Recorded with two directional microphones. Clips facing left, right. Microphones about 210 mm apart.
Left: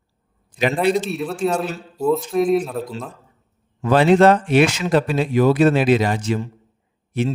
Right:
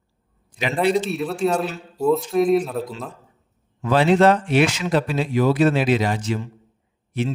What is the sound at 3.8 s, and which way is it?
Speech, 50° left (ahead or behind).